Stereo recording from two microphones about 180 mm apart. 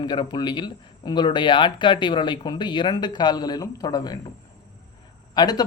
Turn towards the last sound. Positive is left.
turn(degrees=20)  # may be behind; listen again after turning